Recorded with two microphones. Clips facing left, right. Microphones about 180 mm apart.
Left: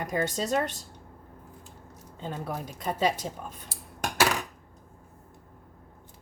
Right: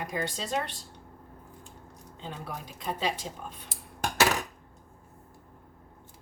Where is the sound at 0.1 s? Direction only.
45° left (ahead or behind).